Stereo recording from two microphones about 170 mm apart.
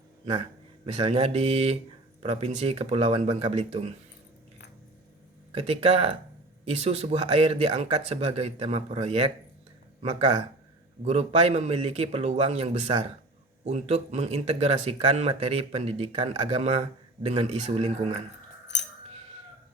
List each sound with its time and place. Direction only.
0.9 s speech: 40° right (ahead or behind)
5.5 s speech: 35° right (ahead or behind)